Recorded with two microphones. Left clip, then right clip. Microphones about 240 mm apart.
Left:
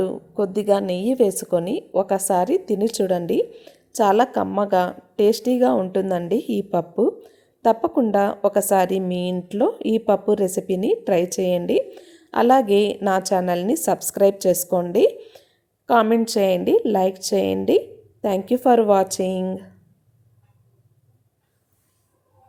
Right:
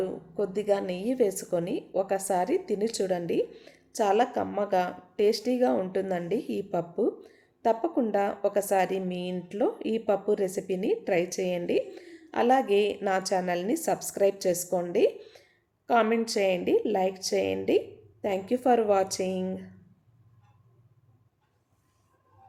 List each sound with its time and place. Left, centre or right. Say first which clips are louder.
0.0 s a woman's voice: left 7 dB; left